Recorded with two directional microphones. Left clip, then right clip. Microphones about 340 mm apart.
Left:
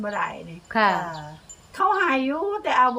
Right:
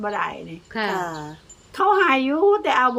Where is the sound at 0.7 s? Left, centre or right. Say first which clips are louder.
Left 6 dB; centre.